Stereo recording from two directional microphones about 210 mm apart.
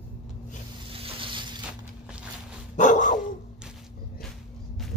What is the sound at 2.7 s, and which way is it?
Dog, 35° left (ahead or behind).